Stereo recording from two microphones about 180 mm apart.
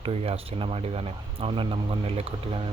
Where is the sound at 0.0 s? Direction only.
35° right (ahead or behind).